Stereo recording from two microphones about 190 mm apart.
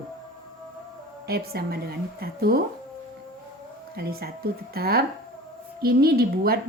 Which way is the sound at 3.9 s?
55° right (ahead or behind).